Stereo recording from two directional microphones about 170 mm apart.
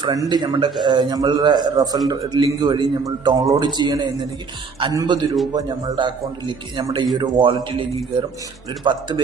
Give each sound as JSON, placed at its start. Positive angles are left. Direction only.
{"t": 0.0, "sound": "a man's voice", "side_deg": -25}